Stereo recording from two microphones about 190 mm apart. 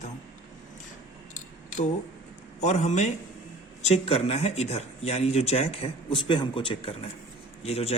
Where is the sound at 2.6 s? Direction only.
35° left (ahead or behind).